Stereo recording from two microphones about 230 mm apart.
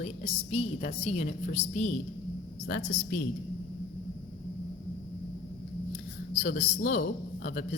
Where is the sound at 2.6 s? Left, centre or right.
Left.